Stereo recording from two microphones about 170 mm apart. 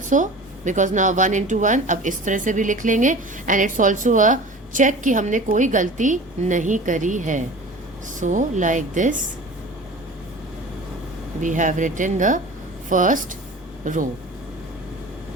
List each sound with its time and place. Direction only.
0.1 s a woman's voice: 45° right (ahead or behind)
11.3 s a woman's voice: 50° right (ahead or behind)